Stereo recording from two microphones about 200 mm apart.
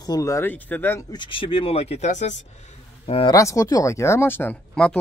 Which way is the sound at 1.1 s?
25° left (ahead or behind).